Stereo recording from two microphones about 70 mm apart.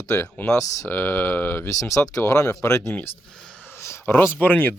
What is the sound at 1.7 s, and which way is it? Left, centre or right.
Speech, left.